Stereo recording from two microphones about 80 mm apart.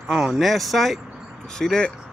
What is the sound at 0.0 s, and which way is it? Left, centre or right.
Speech, centre.